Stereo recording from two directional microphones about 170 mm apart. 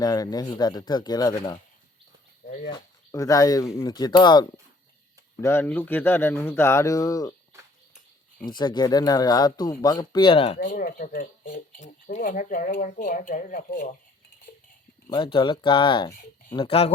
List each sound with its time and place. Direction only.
0.0 s speech: 20° left (ahead or behind)
2.6 s speech: 25° left (ahead or behind)
5.4 s speech: 15° left (ahead or behind)
8.4 s speech: 25° left (ahead or behind)
10.6 s speech: 60° left (ahead or behind)
15.1 s speech: 30° left (ahead or behind)